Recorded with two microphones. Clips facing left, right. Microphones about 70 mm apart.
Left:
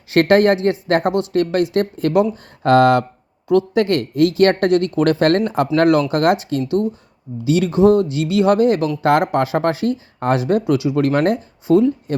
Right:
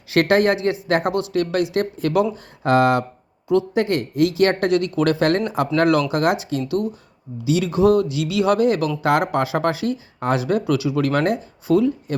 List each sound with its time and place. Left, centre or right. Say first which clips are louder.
0.1 s speech: left 4 dB; left
2.6 s speech: left 4 dB; left
7.8 s speech: left 3 dB; left